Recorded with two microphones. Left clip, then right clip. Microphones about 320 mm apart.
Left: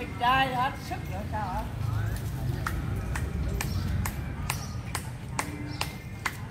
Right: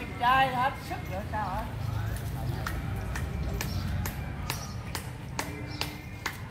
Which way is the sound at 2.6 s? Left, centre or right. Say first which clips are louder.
Left 4 dB; centre.